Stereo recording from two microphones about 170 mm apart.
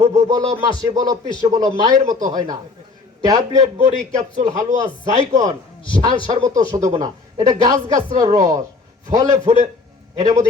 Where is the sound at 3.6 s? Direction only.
45° right (ahead or behind).